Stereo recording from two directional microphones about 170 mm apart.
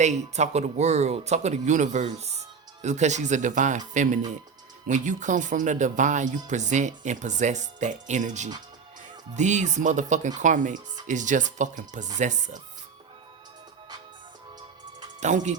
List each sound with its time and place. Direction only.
0.0 s speech: 45° right (ahead or behind)
15.2 s speech: 45° right (ahead or behind)